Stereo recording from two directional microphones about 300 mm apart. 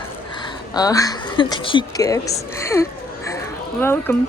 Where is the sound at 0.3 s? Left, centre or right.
Centre.